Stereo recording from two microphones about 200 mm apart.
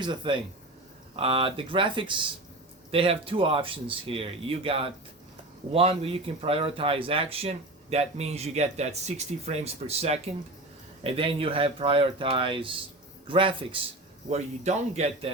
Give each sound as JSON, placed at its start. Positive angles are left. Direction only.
{"t": 0.0, "sound": "speech", "side_deg": -25}